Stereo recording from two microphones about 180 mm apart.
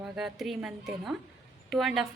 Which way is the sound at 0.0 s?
Centre (ahead or behind).